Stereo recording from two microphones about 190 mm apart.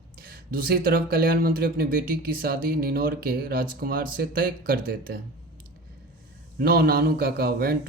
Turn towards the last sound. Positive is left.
turn(degrees=-55)  # may be behind; listen again after turning